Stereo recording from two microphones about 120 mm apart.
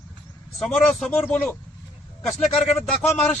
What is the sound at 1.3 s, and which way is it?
Speech, 15° left (ahead or behind).